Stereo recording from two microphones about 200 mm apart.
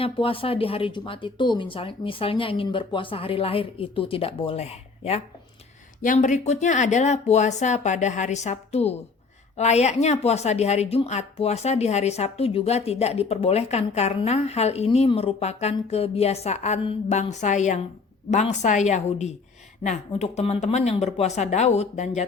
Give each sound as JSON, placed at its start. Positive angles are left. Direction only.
{"t": 0.0, "sound": "a woman's voice", "side_deg": 25}